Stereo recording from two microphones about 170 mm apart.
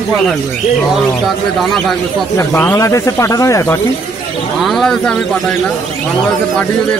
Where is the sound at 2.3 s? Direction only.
15° left (ahead or behind).